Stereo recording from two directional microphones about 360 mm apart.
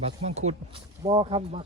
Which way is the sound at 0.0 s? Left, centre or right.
Centre.